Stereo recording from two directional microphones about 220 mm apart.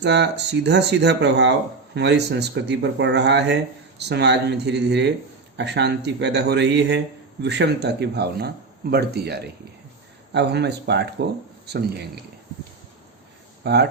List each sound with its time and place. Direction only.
0.0 s speech: 50° right (ahead or behind)
13.6 s speech: 50° right (ahead or behind)